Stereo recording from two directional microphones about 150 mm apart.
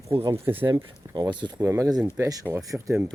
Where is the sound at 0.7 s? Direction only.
30° right (ahead or behind).